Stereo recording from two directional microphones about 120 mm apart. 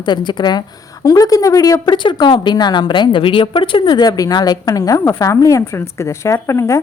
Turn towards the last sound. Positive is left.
turn(degrees=25)  # may be behind; listen again after turning